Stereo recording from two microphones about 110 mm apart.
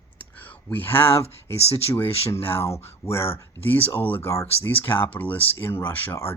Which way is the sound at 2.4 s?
60° left (ahead or behind).